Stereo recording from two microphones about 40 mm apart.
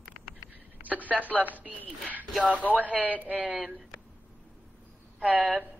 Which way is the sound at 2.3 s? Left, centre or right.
Right.